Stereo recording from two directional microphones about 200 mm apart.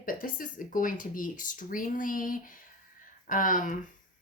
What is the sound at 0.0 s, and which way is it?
A woman's voice, 45° left (ahead or behind).